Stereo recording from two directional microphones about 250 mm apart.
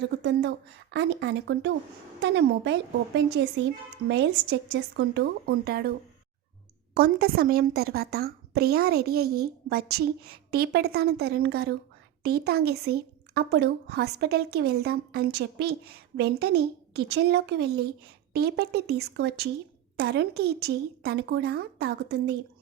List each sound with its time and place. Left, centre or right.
0.2 s speech: right
6.9 s speech: right